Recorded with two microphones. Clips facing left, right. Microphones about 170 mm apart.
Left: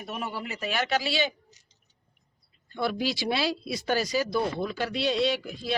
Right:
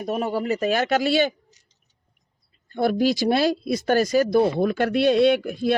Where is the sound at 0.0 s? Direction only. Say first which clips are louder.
Right 10 dB; 40° right (ahead or behind).